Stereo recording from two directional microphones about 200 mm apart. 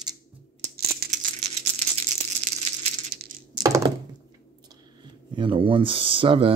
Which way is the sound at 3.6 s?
15° right (ahead or behind).